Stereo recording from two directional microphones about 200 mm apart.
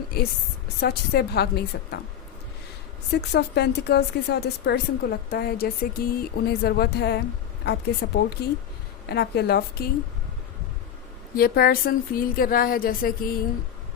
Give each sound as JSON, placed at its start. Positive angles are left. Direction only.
{"t": 0.8, "sound": "a woman's voice", "side_deg": 55}
{"t": 3.2, "sound": "a woman's voice", "side_deg": 55}
{"t": 11.3, "sound": "a woman's voice", "side_deg": 50}